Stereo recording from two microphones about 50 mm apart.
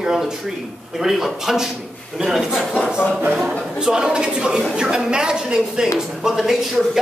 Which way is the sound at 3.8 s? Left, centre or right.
Centre.